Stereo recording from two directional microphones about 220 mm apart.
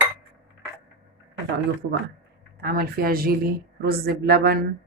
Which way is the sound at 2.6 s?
45° right (ahead or behind).